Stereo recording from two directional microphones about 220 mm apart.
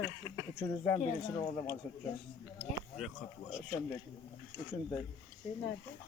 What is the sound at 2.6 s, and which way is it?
Speech, centre (ahead or behind).